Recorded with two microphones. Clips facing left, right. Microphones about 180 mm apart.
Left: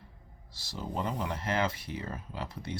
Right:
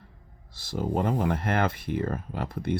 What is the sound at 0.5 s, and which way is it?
Speech, 55° right (ahead or behind).